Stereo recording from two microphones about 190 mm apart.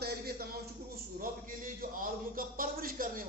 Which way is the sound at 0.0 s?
55° right (ahead or behind).